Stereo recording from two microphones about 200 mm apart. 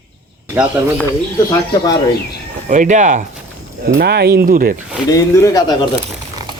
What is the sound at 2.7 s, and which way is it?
Speech, 40° right (ahead or behind).